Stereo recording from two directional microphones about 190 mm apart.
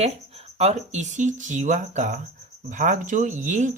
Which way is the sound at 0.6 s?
35° right (ahead or behind).